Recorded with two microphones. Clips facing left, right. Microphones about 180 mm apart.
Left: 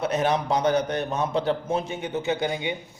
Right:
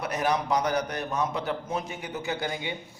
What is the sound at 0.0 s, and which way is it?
A man's voice, 25° left (ahead or behind).